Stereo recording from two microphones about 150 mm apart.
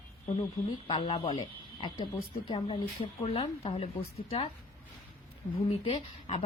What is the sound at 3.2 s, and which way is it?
Speech, 40° left (ahead or behind).